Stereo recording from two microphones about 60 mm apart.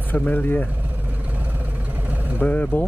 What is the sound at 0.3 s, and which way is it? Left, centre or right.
Speech, left.